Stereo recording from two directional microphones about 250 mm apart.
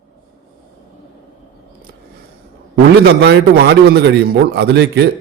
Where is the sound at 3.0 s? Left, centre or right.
Right.